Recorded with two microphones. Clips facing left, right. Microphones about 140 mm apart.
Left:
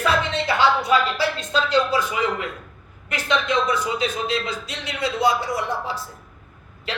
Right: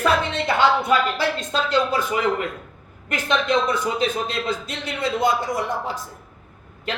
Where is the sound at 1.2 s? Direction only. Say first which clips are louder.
Even; 50° right (ahead or behind).